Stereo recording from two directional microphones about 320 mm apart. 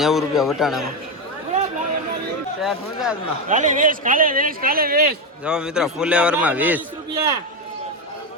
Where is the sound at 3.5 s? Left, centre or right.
Right.